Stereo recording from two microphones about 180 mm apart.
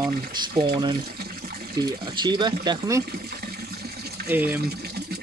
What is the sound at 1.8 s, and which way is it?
Speech, 25° right (ahead or behind).